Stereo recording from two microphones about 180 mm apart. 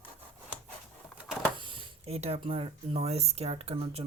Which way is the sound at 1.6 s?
30° right (ahead or behind).